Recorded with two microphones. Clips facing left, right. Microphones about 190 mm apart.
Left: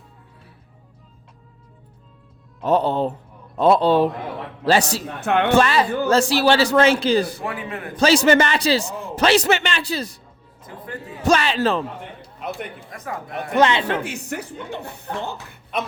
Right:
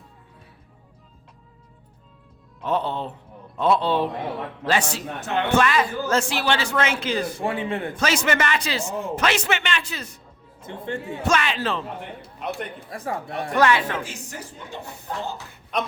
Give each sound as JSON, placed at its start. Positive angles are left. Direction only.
{"t": 2.6, "sound": "a man's voice", "side_deg": 40}
{"t": 5.2, "sound": "speech", "side_deg": 60}
{"t": 5.5, "sound": "a man's voice", "side_deg": 30}
{"t": 7.3, "sound": "speech", "side_deg": -25}
{"t": 7.9, "sound": "a man's voice", "side_deg": 35}
{"t": 10.6, "sound": "speech", "side_deg": -25}
{"t": 11.2, "sound": "a man's voice", "side_deg": 35}
{"t": 12.9, "sound": "speech", "side_deg": -30}
{"t": 13.6, "sound": "a woman's voice", "side_deg": 20}
{"t": 14.0, "sound": "speech", "side_deg": 60}